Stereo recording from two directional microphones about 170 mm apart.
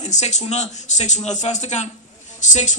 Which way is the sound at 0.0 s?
45° left (ahead or behind).